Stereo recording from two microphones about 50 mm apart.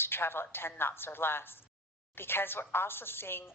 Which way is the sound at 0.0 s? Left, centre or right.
Left.